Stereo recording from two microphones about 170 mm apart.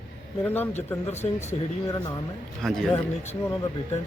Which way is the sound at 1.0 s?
40° left (ahead or behind).